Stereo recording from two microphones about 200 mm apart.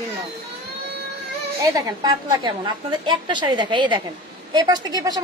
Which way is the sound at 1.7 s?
20° right (ahead or behind).